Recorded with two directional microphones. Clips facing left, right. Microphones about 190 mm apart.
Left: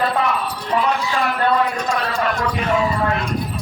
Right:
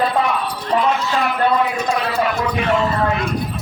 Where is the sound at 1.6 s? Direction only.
5° right (ahead or behind).